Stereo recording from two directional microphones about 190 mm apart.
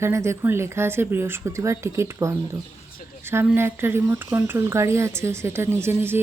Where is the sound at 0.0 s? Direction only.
15° right (ahead or behind).